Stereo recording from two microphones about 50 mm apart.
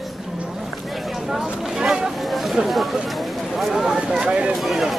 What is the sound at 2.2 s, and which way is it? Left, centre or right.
Speech, centre.